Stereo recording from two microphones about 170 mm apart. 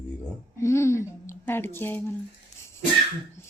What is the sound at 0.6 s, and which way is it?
Speech, 15° left (ahead or behind).